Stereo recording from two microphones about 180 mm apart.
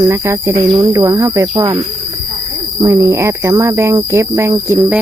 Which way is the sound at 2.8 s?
15° right (ahead or behind).